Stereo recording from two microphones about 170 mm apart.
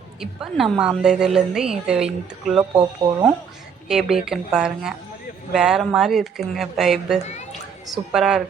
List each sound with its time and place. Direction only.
0.2 s a woman's voice: centre (ahead or behind)
2.7 s speech: 20° right (ahead or behind)
3.8 s a woman's voice: centre (ahead or behind)